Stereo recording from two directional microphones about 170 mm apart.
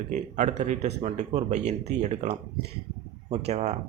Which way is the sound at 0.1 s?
45° right (ahead or behind).